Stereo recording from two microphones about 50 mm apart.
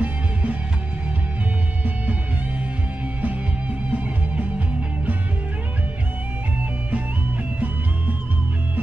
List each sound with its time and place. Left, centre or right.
0.0 s music: right
3.9 s music: right